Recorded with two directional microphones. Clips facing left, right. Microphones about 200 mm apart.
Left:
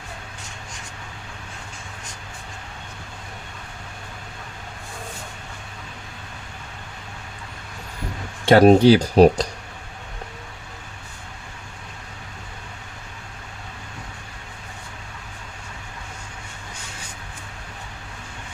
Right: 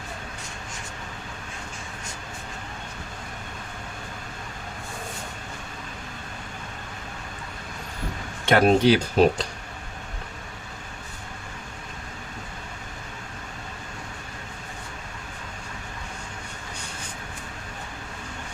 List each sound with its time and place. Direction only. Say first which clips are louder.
8.4 s speech: left 6 dB; 35° left (ahead or behind)